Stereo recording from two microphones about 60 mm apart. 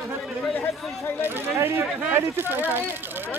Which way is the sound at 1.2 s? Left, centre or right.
Right.